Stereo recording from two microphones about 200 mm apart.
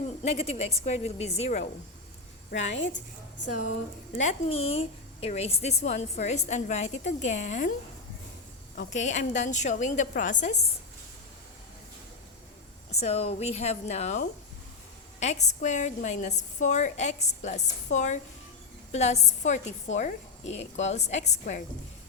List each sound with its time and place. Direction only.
0.2 s a woman's voice: 30° left (ahead or behind)
2.7 s a woman's voice: 65° left (ahead or behind)
4.2 s a woman's voice: 35° left (ahead or behind)
8.7 s a woman's voice: 40° left (ahead or behind)
12.9 s a woman's voice: 30° left (ahead or behind)
15.2 s a woman's voice: 35° left (ahead or behind)